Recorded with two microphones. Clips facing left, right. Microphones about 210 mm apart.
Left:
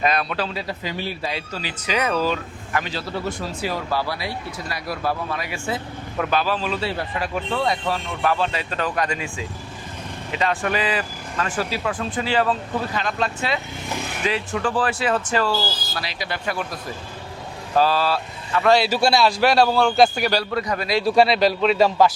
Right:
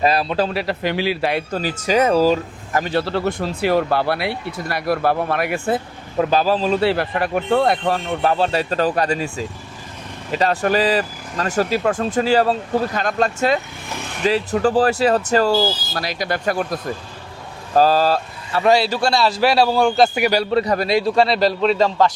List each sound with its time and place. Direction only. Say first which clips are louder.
0.0 s speech: right 5 dB; 30° right (ahead or behind)
0.5 s speech: right 7 dB; 70° right (ahead or behind); by 2.9 s 40° right (ahead or behind)
2.9 s speech: right 7 dB; 70° right (ahead or behind)
6.1 s speech: right 5 dB; 35° right (ahead or behind)
6.7 s speech: right 7 dB; 75° right (ahead or behind); by 8.1 s 50° right (ahead or behind)
8.2 s speech: right 3 dB; 35° right (ahead or behind)
17.7 s speech: right 4 dB; 40° right (ahead or behind)
18.9 s a man's voice: even; 10° left (ahead or behind)
19.2 s a man's voice: right 1 dB; 5° right (ahead or behind)
20.4 s a man's voice: right 6 dB; 25° right (ahead or behind)
21.0 s speech: even; 5° left (ahead or behind)